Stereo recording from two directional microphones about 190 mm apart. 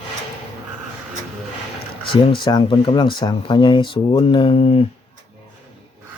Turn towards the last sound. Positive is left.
turn(degrees=30)  # may be behind; listen again after turning